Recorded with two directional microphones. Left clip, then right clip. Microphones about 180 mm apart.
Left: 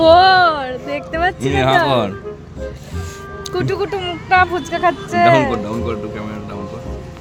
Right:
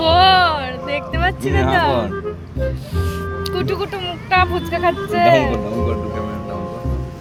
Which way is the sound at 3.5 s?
55° left (ahead or behind).